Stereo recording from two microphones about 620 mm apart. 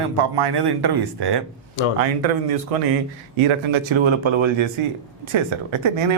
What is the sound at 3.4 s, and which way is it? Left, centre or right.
Speech, right.